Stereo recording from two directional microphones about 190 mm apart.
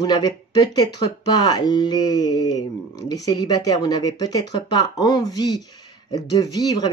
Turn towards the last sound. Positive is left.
turn(degrees=20)  # may be behind; listen again after turning